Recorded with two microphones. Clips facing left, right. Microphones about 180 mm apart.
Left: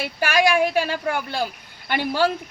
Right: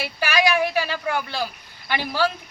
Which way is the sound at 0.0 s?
50° left (ahead or behind).